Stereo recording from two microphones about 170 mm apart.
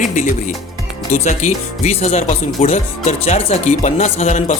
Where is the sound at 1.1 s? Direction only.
45° left (ahead or behind).